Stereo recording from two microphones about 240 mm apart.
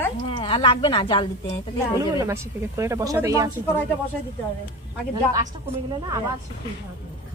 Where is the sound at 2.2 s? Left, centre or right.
Centre.